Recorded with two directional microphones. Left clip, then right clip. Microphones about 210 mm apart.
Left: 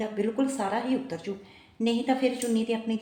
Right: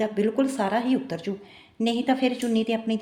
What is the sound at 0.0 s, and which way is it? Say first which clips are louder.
A woman's voice: right 4 dB; 55° right (ahead or behind).